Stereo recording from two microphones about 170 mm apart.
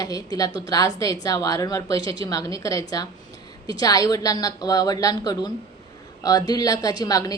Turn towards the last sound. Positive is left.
turn(degrees=20)  # may be behind; listen again after turning